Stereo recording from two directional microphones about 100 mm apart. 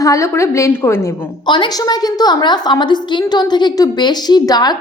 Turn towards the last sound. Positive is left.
turn(degrees=45)  # may be behind; listen again after turning